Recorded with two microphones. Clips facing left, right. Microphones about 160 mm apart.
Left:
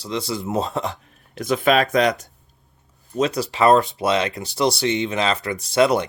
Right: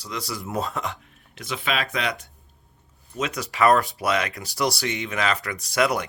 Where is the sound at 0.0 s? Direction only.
25° left (ahead or behind).